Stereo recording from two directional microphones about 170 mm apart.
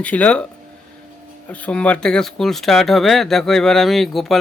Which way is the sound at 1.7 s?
5° left (ahead or behind).